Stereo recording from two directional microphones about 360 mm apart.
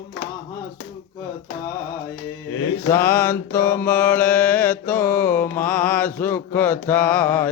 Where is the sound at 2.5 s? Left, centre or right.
Left.